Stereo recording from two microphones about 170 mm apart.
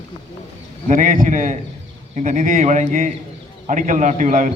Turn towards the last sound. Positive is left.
turn(degrees=-50)  # may be behind; listen again after turning